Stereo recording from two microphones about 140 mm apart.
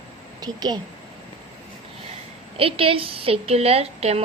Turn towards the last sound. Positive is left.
turn(degrees=-50)  # may be behind; listen again after turning